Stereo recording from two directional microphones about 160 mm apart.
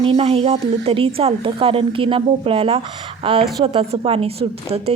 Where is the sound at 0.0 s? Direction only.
35° right (ahead or behind).